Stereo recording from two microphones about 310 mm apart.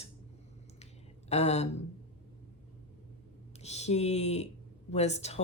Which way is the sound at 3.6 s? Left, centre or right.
Left.